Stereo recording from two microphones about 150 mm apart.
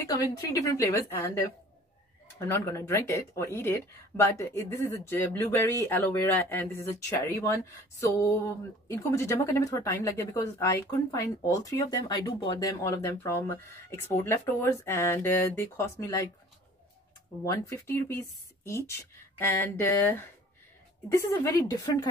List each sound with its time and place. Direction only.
0.0 s speech: 20° left (ahead or behind)
12.8 s speech: 15° left (ahead or behind)
17.5 s speech: 20° left (ahead or behind)
21.3 s speech: 25° left (ahead or behind)